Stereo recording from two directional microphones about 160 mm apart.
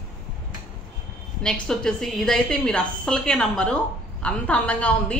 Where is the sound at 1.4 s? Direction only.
5° left (ahead or behind).